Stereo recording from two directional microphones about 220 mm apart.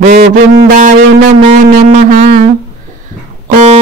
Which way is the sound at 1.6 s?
35° right (ahead or behind).